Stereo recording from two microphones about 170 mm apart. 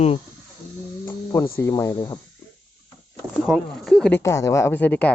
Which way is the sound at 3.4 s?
Centre (ahead or behind).